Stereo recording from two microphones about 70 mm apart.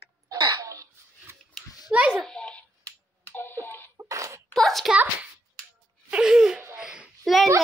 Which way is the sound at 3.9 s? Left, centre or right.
Right.